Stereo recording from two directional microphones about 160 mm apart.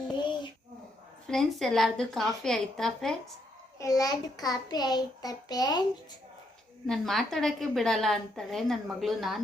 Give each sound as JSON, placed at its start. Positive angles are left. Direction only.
{"t": 1.3, "sound": "a woman's voice", "side_deg": 0}
{"t": 3.8, "sound": "a child's voice", "side_deg": 20}
{"t": 6.8, "sound": "a woman's voice", "side_deg": 0}